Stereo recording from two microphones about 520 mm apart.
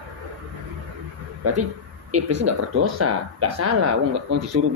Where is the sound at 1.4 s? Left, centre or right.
Right.